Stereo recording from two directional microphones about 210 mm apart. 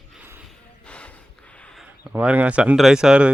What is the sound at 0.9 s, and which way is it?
Snort, 5° left (ahead or behind).